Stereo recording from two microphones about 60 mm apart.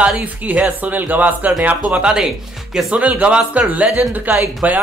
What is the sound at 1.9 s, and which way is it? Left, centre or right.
Speech, centre.